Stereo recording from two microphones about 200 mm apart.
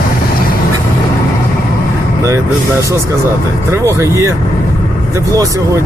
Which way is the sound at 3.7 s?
15° right (ahead or behind).